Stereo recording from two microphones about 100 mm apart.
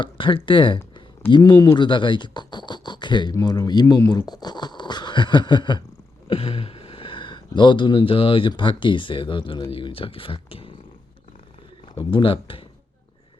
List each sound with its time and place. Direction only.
0.0 s speech: 55° left (ahead or behind)
1.3 s speech: 45° left (ahead or behind)
3.3 s speech: 35° left (ahead or behind); by 5.8 s 50° left (ahead or behind)
6.2 s speech: 65° left (ahead or behind)
11.9 s speech: 60° left (ahead or behind)